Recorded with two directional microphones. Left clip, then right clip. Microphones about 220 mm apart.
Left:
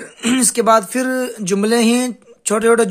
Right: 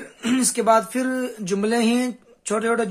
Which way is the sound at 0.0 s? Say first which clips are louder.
Left 5 dB; 35° left (ahead or behind).